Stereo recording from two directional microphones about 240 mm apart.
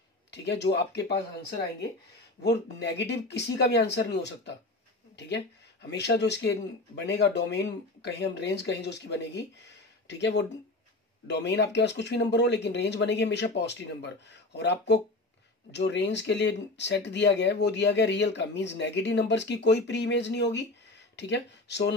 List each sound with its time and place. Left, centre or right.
0.3 s speech: left
2.4 s speech: left